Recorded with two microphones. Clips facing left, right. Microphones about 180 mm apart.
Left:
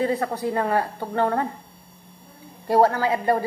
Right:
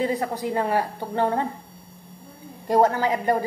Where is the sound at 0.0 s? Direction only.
15° right (ahead or behind).